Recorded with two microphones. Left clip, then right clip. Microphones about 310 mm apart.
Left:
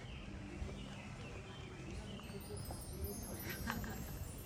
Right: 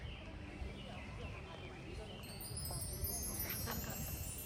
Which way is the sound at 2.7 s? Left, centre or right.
Centre.